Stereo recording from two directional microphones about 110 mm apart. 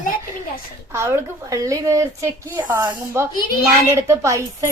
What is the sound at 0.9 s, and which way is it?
A woman's voice, 25° right (ahead or behind).